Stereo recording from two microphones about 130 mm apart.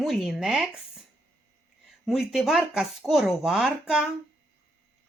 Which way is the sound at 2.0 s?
Centre (ahead or behind).